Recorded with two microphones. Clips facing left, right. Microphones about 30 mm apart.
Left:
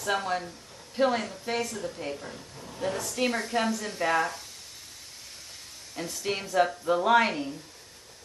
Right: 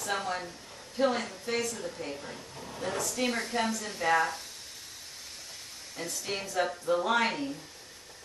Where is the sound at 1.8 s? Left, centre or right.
Centre.